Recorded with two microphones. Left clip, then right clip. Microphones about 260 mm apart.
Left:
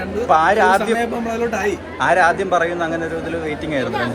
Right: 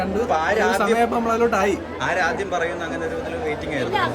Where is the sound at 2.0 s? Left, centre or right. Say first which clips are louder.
Left 8 dB; centre.